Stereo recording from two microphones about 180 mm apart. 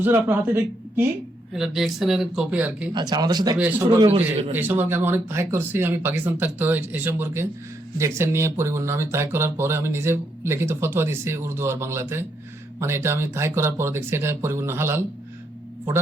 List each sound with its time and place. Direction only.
0.0 s speech: 10° right (ahead or behind)
2.9 s speech: 20° right (ahead or behind)
4.5 s speech: 10° right (ahead or behind)